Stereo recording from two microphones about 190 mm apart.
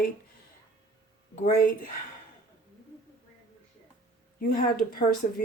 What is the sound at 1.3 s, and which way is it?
Speech, 40° left (ahead or behind).